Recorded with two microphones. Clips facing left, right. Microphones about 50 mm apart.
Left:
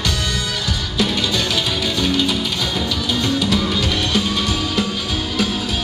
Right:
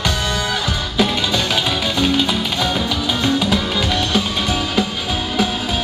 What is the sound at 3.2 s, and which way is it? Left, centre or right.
Music, right.